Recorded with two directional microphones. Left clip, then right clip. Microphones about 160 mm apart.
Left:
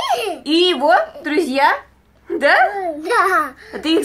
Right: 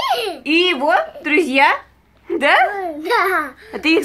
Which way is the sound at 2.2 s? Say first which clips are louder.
Even; 50° right (ahead or behind).